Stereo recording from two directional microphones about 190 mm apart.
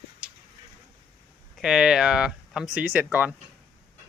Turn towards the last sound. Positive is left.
turn(degrees=-10)  # may be behind; listen again after turning